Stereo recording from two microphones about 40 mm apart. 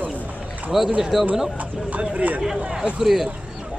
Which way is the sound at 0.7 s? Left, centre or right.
Centre.